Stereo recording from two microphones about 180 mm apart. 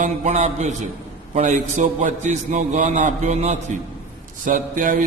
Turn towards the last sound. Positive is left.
turn(degrees=-45)  # may be behind; listen again after turning